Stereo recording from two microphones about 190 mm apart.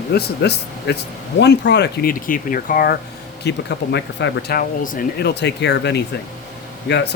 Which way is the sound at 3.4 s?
65° left (ahead or behind).